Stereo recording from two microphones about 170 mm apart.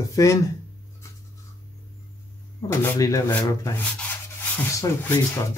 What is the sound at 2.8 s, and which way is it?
Speech, 20° left (ahead or behind).